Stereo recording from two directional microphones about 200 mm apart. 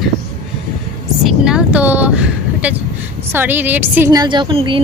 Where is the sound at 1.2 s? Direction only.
5° right (ahead or behind).